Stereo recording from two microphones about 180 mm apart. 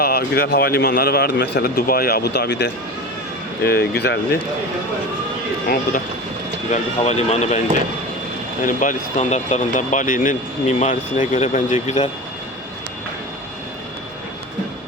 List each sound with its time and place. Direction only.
0.0 s speech: 60° left (ahead or behind); by 2.7 s 75° left (ahead or behind)
3.6 s speech: 60° left (ahead or behind)
5.6 s speech: 50° left (ahead or behind)
6.7 s speech: 40° left (ahead or behind)
8.6 s speech: 45° left (ahead or behind)